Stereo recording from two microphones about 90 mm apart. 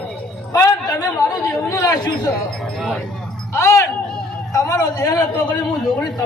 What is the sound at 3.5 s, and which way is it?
A man's voice, 35° left (ahead or behind).